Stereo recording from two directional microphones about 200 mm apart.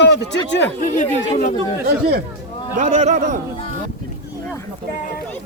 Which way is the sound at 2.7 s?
35° right (ahead or behind).